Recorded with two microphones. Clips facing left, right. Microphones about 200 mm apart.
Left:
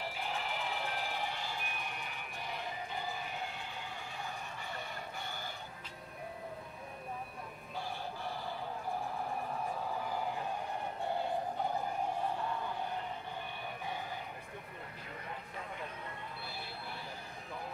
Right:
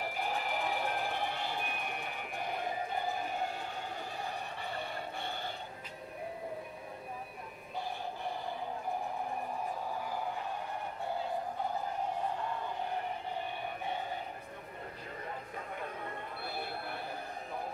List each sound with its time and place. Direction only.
0.1 s music: 45° right (ahead or behind)
3.4 s train: 45° right (ahead or behind)
4.6 s music: 30° right (ahead or behind)
16.4 s a sound: 55° right (ahead or behind)